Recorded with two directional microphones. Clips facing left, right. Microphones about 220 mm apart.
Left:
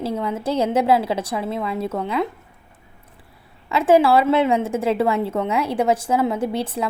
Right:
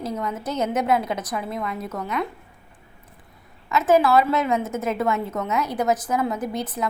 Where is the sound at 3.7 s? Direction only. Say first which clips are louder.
Left 2 dB; 30° left (ahead or behind).